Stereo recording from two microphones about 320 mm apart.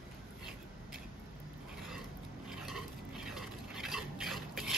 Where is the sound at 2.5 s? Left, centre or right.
Centre.